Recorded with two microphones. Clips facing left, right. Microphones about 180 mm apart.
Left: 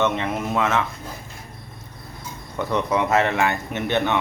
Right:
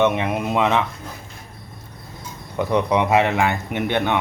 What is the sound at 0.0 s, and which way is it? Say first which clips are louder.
Speech: right 3 dB; 15° right (ahead or behind).